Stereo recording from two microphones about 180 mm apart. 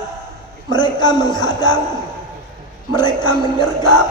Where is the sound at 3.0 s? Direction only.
25° left (ahead or behind).